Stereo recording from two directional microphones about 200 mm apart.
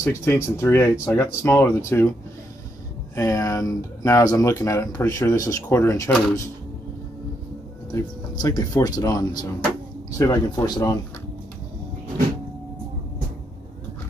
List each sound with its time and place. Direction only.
0.0 s speech: 10° left (ahead or behind)
3.2 s speech: 15° left (ahead or behind)
7.9 s speech: 15° left (ahead or behind)